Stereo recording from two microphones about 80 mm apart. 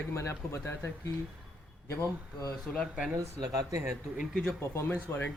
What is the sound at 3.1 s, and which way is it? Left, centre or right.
Speech, right.